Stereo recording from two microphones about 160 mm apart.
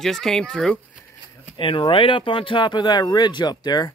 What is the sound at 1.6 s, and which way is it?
Speech, 30° left (ahead or behind).